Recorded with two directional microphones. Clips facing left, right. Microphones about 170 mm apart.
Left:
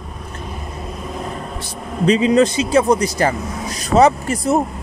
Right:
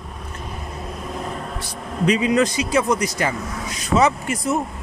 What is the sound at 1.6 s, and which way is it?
Speech, 25° left (ahead or behind).